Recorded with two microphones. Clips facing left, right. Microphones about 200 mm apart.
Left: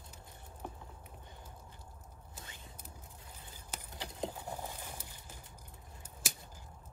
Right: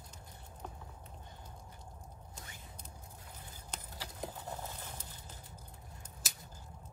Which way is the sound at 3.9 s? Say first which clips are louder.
Left 5 dB; 20° left (ahead or behind).